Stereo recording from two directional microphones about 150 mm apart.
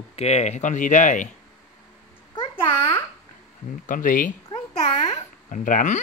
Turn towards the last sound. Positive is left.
turn(degrees=55)  # may be behind; listen again after turning